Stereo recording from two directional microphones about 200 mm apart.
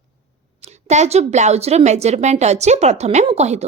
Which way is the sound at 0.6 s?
35° right (ahead or behind).